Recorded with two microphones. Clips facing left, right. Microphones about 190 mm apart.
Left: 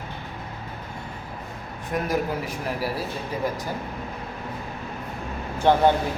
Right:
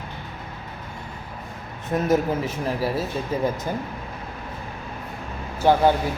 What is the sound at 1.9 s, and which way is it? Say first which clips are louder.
Speech: right 3 dB; 25° right (ahead or behind).